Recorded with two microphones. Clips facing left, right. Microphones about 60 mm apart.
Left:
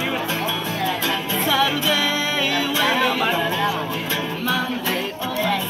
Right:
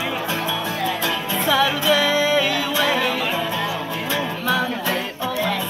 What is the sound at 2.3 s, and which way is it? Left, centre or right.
Music, left.